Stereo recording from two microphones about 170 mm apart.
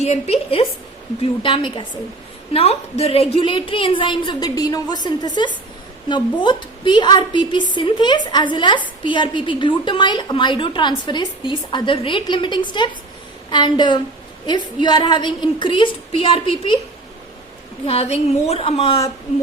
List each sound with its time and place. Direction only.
0.0 s a woman's voice: 40° left (ahead or behind)
17.8 s a woman's voice: 35° left (ahead or behind)